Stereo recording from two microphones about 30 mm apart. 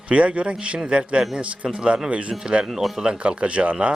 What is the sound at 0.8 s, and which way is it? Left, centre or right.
A man's voice, right.